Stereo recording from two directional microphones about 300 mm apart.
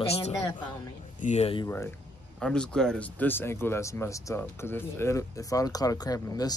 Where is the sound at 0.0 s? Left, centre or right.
Centre.